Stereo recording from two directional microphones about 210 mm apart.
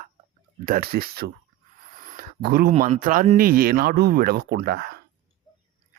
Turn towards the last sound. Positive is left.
turn(degrees=-50)  # may be behind; listen again after turning